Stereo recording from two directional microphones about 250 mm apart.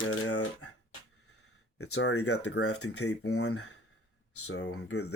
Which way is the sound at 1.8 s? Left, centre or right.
Left.